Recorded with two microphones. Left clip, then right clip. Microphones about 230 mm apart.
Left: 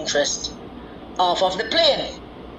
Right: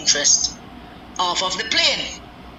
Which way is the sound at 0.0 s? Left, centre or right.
Centre.